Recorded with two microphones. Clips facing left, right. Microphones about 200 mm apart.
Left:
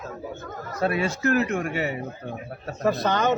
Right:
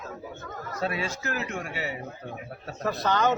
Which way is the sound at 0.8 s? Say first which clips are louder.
Left 7 dB; 55° left (ahead or behind).